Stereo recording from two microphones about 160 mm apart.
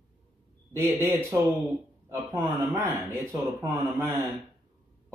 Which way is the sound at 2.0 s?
15° right (ahead or behind).